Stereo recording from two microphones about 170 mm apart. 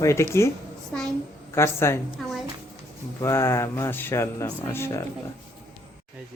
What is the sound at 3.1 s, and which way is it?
Speech, 15° left (ahead or behind).